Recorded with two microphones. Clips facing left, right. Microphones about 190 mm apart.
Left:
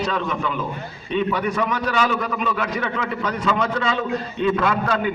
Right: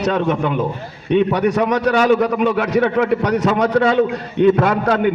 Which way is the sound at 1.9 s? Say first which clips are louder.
Right 8 dB; 55° right (ahead or behind).